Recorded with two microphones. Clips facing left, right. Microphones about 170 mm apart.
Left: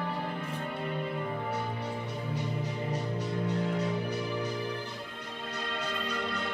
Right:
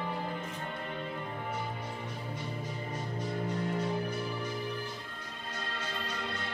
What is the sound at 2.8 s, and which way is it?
Music, 70° left (ahead or behind).